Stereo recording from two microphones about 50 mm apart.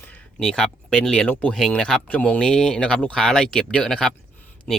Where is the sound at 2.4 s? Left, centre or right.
Centre.